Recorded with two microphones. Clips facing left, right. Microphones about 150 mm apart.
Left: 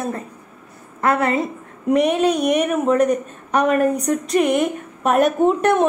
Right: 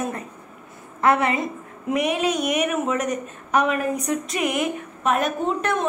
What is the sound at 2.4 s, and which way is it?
A woman's voice, 35° left (ahead or behind).